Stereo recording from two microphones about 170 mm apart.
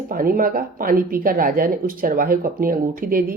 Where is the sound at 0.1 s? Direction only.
55° right (ahead or behind).